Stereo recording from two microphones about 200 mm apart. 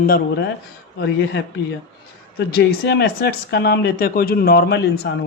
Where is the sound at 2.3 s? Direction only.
55° left (ahead or behind).